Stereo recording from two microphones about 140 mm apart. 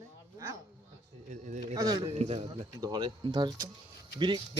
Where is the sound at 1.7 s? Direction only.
25° right (ahead or behind).